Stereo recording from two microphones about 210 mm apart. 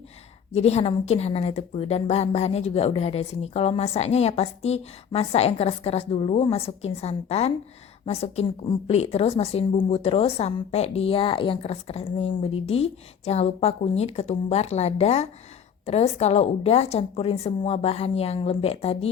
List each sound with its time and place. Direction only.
0.5 s a woman's voice: 30° left (ahead or behind)